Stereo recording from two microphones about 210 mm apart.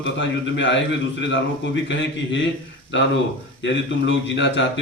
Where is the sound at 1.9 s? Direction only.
60° left (ahead or behind).